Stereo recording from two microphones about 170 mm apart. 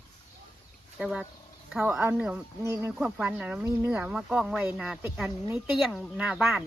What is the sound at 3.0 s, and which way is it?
Speech, 5° right (ahead or behind).